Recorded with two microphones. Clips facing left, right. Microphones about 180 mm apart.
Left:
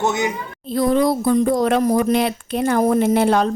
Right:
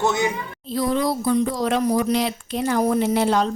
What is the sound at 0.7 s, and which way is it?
Speech, 55° left (ahead or behind).